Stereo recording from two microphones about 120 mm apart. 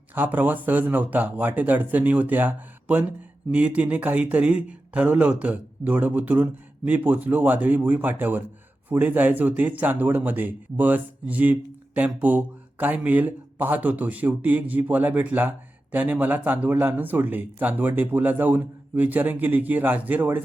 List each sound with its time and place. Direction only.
0.1 s speech: 15° right (ahead or behind)